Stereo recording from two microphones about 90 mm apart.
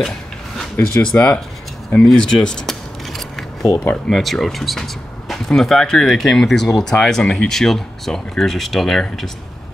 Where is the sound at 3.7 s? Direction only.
15° left (ahead or behind).